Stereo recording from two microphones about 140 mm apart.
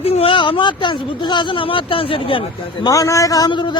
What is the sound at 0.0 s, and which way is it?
Speech, 40° left (ahead or behind).